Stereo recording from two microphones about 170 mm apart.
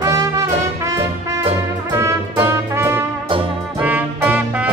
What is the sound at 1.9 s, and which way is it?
Music, 15° right (ahead or behind).